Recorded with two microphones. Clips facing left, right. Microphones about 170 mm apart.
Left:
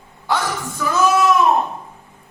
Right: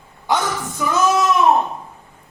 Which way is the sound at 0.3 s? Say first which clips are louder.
Right 1 dB; 20° right (ahead or behind).